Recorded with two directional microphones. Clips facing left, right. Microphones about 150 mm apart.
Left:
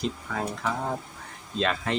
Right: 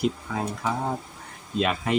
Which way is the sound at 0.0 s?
15° right (ahead or behind).